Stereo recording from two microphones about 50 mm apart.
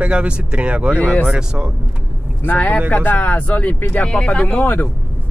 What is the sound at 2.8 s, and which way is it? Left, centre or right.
Speech, left.